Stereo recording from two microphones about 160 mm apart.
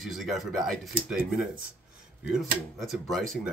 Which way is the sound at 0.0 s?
Centre (ahead or behind).